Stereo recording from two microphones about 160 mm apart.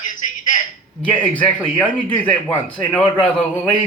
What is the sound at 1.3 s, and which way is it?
Speech, 10° left (ahead or behind).